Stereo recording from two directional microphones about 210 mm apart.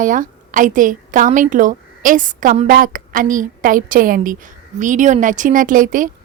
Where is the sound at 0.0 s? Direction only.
40° right (ahead or behind).